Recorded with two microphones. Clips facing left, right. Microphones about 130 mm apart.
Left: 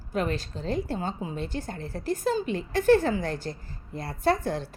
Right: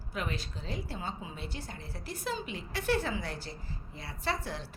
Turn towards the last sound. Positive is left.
turn(degrees=45)  # may be behind; listen again after turning